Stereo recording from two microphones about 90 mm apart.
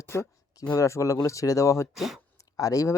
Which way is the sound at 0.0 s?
35° left (ahead or behind).